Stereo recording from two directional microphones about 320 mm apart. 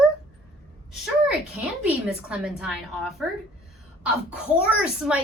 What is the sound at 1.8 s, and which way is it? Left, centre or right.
A woman's voice, centre.